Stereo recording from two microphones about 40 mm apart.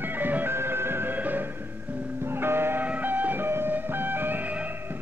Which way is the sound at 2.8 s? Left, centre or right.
Right.